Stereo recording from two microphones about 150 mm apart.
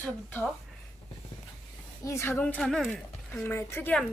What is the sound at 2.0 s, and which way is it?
A woman's voice, 20° left (ahead or behind).